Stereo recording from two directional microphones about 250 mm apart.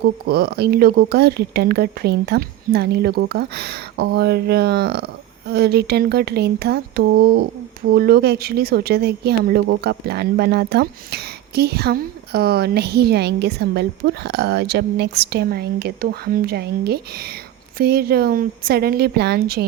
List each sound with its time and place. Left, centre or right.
0.0 s speech: right